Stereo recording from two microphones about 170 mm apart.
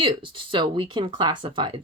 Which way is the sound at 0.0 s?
30° right (ahead or behind).